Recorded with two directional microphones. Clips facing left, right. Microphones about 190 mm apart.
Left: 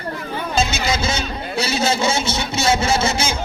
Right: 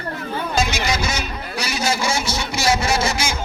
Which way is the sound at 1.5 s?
25° left (ahead or behind).